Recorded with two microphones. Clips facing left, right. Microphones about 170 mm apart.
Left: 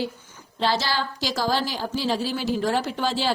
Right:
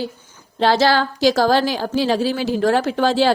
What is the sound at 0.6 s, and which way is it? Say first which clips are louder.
A woman's voice: right 9 dB; 80° right.